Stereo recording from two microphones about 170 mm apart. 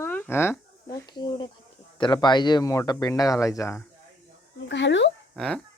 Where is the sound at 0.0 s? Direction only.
10° left (ahead or behind).